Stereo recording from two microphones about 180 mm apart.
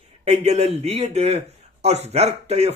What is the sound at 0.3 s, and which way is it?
A man's voice, 35° right (ahead or behind).